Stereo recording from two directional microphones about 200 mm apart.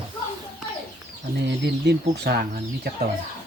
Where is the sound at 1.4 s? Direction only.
55° right (ahead or behind).